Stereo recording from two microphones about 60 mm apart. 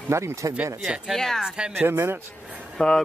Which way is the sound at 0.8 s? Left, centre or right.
Centre.